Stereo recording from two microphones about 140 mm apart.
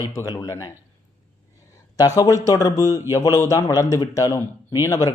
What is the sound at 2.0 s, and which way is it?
A man's voice, 25° left (ahead or behind).